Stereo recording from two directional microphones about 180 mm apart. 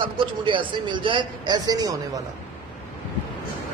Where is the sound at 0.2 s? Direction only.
25° right (ahead or behind).